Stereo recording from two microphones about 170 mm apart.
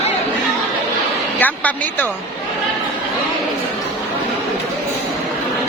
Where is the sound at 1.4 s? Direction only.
10° left (ahead or behind).